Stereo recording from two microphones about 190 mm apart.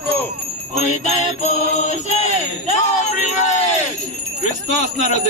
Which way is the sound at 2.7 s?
40° left (ahead or behind).